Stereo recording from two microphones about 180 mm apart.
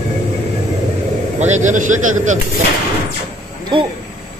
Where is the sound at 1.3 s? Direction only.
40° right (ahead or behind).